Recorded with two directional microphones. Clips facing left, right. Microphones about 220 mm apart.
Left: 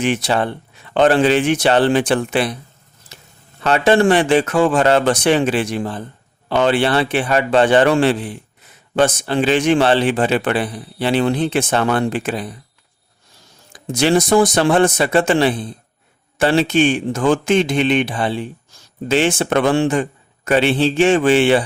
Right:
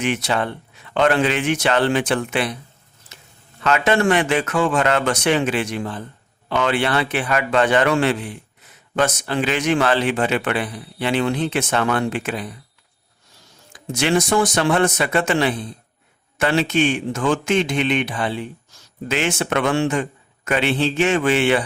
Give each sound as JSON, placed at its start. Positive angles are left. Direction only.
{"t": 0.0, "sound": "a man's voice", "side_deg": 35}
{"t": 3.6, "sound": "a man's voice", "side_deg": 35}
{"t": 13.7, "sound": "a man's voice", "side_deg": 35}